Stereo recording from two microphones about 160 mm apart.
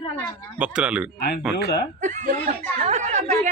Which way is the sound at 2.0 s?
50° right (ahead or behind).